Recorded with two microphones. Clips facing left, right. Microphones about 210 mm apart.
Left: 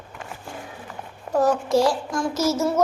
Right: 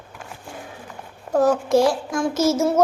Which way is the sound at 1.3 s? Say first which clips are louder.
Right 2 dB; 50° right (ahead or behind).